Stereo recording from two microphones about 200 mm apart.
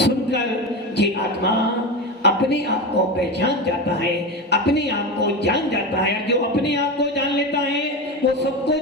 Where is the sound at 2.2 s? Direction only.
55° left (ahead or behind).